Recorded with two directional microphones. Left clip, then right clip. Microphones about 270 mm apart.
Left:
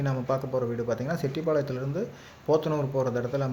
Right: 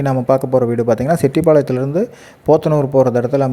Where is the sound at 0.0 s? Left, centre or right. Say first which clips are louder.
Right 14 dB; right.